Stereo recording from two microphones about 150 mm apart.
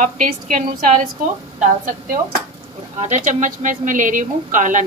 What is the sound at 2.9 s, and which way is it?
Speech, 50° right (ahead or behind).